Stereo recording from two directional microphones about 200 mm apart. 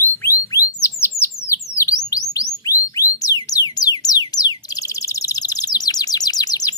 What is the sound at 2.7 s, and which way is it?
Music, 15° left (ahead or behind).